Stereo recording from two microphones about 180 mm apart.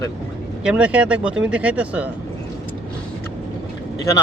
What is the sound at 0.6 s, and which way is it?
Speech, 5° right (ahead or behind).